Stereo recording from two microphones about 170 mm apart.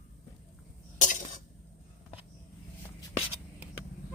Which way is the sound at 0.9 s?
50° left (ahead or behind).